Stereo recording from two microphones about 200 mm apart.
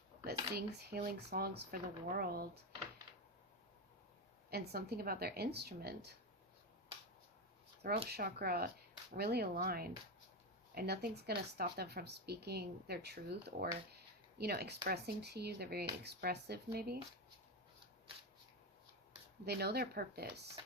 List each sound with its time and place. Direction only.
0.3 s speech: 50° right (ahead or behind)
4.5 s speech: 50° right (ahead or behind)
8.1 s speech: 50° right (ahead or behind)
19.5 s speech: 50° right (ahead or behind)